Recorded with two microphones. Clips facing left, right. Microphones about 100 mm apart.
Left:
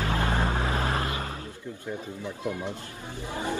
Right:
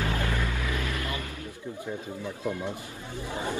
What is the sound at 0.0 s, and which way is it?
Vehicle, 35° left (ahead or behind).